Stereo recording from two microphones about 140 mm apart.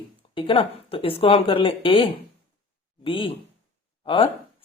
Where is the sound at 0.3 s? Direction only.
40° left (ahead or behind).